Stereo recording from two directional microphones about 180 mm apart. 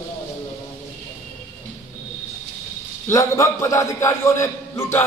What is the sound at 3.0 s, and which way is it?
A man's voice, 15° left (ahead or behind).